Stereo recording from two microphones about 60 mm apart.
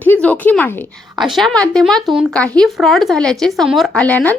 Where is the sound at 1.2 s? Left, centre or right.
Centre.